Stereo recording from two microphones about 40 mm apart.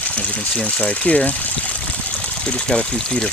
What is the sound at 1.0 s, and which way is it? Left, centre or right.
Speech, left.